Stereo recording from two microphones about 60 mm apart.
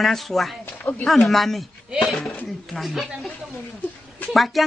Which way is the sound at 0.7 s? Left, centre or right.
Left.